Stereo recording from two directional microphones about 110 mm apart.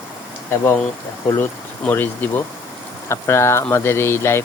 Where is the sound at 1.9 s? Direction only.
20° left (ahead or behind).